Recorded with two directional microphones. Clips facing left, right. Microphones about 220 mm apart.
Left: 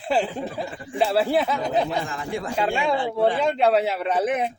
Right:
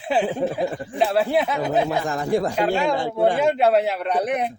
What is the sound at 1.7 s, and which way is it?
Speech, 40° right (ahead or behind).